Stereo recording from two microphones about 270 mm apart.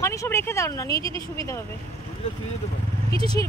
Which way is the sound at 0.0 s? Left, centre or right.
Centre.